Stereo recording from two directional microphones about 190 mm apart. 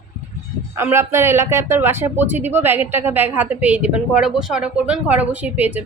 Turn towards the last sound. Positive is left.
turn(degrees=-10)  # may be behind; listen again after turning